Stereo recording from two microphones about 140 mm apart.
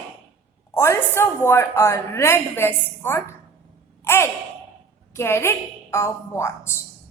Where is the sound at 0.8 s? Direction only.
20° left (ahead or behind).